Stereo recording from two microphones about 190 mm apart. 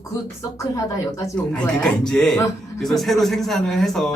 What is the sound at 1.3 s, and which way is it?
A man's voice, 5° left (ahead or behind).